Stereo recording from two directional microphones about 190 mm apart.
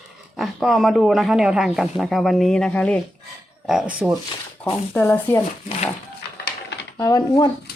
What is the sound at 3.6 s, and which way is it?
Speech, 5° right (ahead or behind).